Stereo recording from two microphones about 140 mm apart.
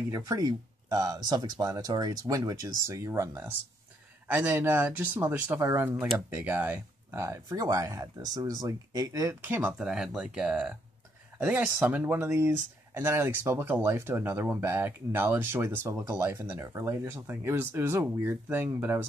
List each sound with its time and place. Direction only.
0.1 s speech: 25° right (ahead or behind)
9.4 s speech: 10° right (ahead or behind)